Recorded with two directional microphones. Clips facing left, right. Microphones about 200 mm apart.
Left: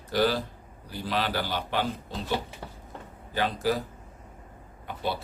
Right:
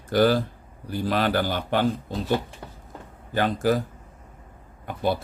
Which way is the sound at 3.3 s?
50° right (ahead or behind).